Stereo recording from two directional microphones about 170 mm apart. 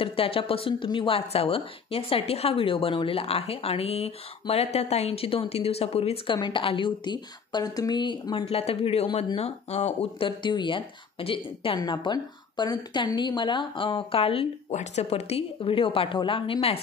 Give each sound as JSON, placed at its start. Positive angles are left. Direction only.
{"t": 0.0, "sound": "a woman's voice", "side_deg": 35}